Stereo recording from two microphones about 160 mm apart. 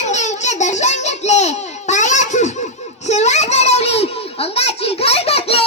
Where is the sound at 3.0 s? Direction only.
45° left (ahead or behind).